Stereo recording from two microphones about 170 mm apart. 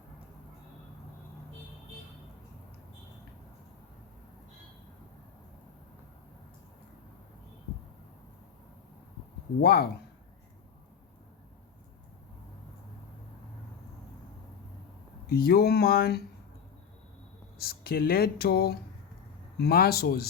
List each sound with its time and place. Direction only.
9.6 s speech: 65° left (ahead or behind)
15.3 s speech: 60° left (ahead or behind)
17.6 s speech: 60° left (ahead or behind)